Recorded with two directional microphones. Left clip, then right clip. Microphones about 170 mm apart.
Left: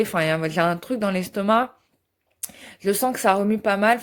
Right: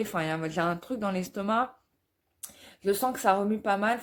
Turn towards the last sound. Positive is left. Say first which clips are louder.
# left 8 dB
turn(degrees=45)  # may be behind; listen again after turning